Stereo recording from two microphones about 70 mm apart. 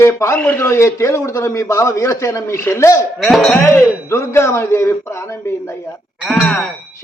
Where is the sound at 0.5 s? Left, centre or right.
Left.